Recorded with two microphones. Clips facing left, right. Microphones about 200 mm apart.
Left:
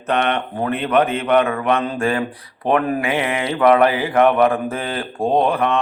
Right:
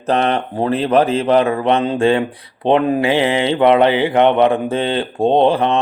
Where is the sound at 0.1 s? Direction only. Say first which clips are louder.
Right 3 dB; 30° right (ahead or behind).